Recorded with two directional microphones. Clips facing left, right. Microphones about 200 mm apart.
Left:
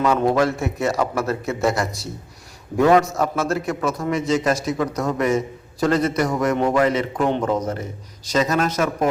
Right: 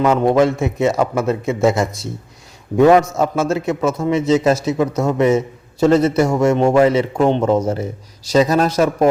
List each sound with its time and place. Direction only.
0.0 s a man's voice: 20° right (ahead or behind)